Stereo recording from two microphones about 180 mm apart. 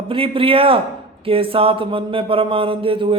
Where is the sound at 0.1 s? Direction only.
30° right (ahead or behind).